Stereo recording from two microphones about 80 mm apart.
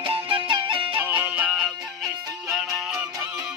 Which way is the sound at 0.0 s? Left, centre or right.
Right.